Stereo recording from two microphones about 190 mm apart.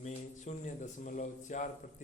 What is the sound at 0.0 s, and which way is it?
A man's voice, 40° left (ahead or behind).